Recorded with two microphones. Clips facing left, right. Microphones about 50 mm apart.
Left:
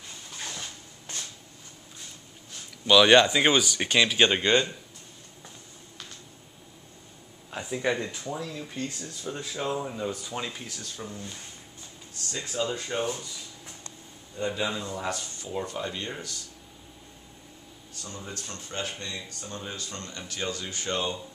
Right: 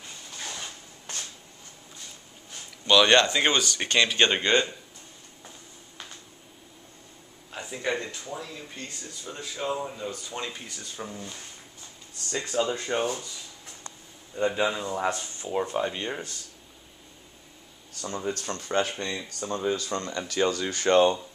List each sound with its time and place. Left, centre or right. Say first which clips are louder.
2.9 s speech: left 2 dB; centre
7.5 s speech: left 2 dB; centre
8.4 s speech: left 4 dB; centre
12.2 s speech: right 4 dB; centre
13.8 s speech: right 1 dB; right
18.0 s speech: right 9 dB; right
19.4 s speech: right 13 dB; right